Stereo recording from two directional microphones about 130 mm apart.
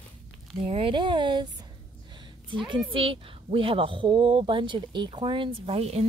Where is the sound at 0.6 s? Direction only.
45° right (ahead or behind).